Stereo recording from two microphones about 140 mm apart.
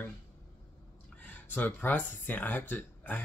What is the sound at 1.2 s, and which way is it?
Speech, 10° left (ahead or behind).